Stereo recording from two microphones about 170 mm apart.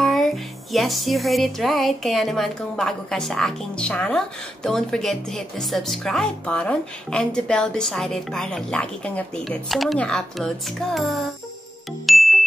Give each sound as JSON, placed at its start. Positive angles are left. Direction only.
{"t": 0.0, "sound": "speech", "side_deg": 0}
{"t": 12.1, "sound": "ding", "side_deg": 0}